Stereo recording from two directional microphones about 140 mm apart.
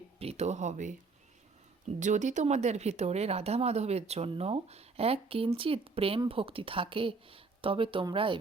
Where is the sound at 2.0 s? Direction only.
60° right (ahead or behind).